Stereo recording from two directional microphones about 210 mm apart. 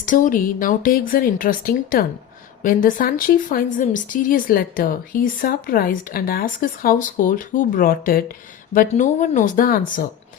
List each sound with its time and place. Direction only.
0.0 s a woman's voice: 40° left (ahead or behind)